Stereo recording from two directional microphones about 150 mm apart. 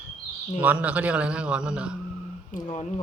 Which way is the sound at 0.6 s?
10° right (ahead or behind).